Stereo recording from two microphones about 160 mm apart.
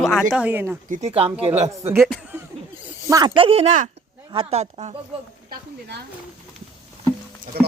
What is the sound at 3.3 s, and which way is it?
Speech, 35° right (ahead or behind).